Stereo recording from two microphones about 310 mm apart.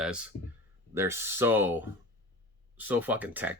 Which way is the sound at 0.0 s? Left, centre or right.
Centre.